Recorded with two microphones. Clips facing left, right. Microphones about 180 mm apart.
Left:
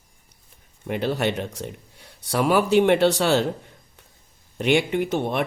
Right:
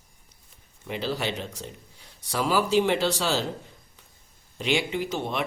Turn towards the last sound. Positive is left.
turn(degrees=55)  # may be behind; listen again after turning